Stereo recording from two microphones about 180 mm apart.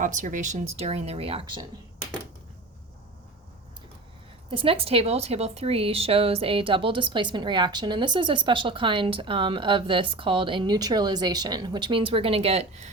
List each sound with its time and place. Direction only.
0.0 s speech: 45° right (ahead or behind); by 1.6 s 30° right (ahead or behind)
4.5 s speech: 30° right (ahead or behind)